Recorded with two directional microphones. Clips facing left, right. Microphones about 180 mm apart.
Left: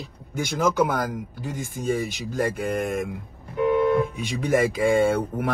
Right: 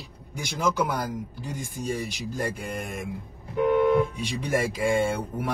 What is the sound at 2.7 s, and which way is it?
Speech, 50° left (ahead or behind).